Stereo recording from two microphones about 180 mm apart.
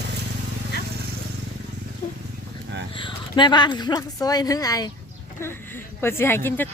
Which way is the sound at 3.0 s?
25° left (ahead or behind).